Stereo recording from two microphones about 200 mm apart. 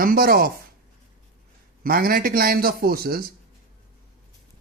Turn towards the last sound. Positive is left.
turn(degrees=-50)  # may be behind; listen again after turning